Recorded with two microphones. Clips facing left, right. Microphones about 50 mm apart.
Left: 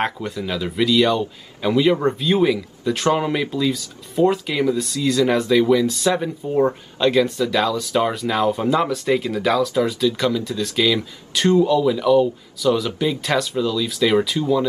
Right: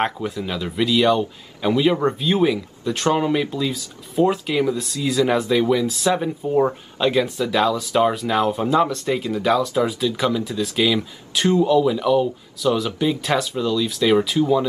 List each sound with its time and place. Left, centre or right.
0.0 s speech: centre